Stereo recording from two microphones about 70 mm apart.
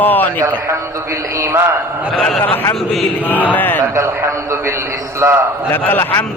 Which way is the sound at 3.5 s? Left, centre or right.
Left.